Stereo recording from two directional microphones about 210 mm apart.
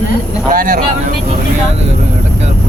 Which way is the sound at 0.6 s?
45° right (ahead or behind).